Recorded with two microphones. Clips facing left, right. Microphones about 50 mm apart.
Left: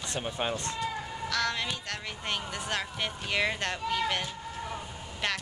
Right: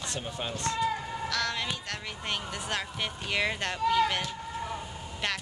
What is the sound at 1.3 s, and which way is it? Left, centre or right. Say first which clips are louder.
Speech: left 2 dB; centre.